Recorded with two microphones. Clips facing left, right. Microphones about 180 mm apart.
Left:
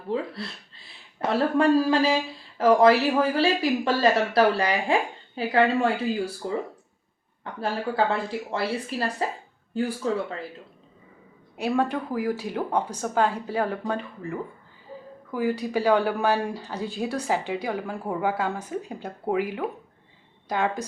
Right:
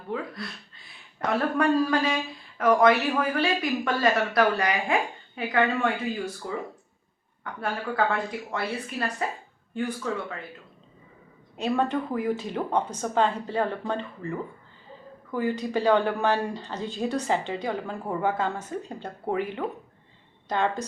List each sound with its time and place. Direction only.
0.1 s speech: 30° left (ahead or behind)
11.5 s speech: 10° left (ahead or behind)